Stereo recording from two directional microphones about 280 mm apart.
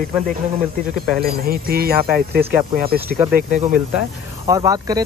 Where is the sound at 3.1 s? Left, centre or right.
Centre.